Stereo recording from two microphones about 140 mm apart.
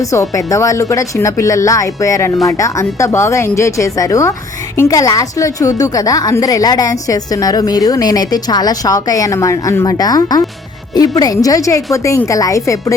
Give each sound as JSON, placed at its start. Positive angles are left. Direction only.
{"t": 0.1, "sound": "a woman's voice", "side_deg": 25}